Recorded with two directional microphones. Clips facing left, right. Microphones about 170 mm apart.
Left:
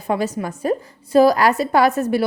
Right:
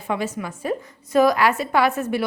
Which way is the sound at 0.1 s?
40° left (ahead or behind).